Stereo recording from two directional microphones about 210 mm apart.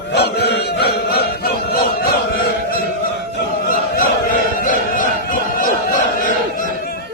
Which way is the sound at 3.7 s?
40° left (ahead or behind).